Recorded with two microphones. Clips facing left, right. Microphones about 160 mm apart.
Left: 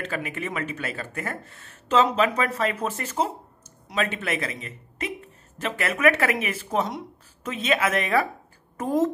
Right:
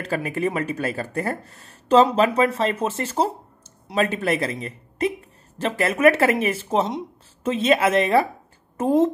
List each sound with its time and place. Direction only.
0.0 s speech: 35° right (ahead or behind)